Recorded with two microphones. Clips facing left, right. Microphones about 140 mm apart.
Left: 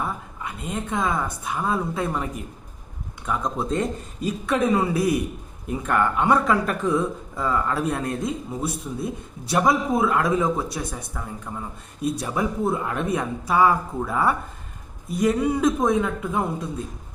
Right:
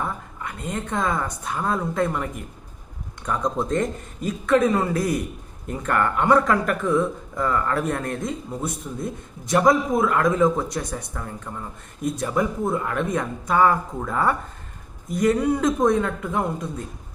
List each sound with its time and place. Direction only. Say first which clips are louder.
0.4 s a man's voice: even; 10° left (ahead or behind)